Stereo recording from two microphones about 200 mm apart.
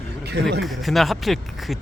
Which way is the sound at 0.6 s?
Centre (ahead or behind).